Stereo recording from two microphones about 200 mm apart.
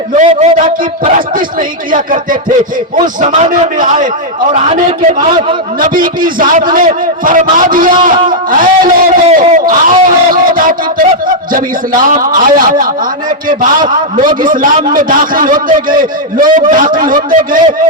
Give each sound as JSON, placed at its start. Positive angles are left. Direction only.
{"t": 0.2, "sound": "a man's voice", "side_deg": -35}
{"t": 2.5, "sound": "a man's voice", "side_deg": -40}
{"t": 5.8, "sound": "a man's voice", "side_deg": -45}